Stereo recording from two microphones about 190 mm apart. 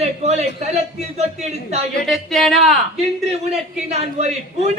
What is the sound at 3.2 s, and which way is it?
Speech, 35° right (ahead or behind).